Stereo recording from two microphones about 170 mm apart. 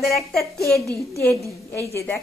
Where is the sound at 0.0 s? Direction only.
Centre (ahead or behind).